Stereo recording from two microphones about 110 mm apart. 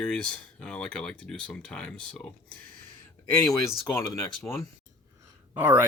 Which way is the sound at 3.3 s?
30° left (ahead or behind).